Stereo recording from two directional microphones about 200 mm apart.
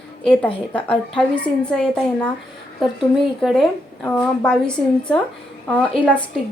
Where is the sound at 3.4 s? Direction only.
Centre (ahead or behind).